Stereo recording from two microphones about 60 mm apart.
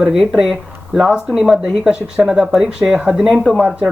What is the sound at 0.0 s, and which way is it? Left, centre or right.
Speech, centre.